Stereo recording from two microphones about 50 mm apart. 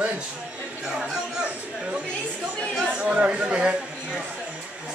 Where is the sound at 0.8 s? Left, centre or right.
Centre.